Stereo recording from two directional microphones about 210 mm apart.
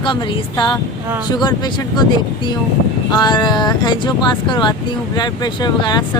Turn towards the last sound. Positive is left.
turn(degrees=20)  # may be behind; listen again after turning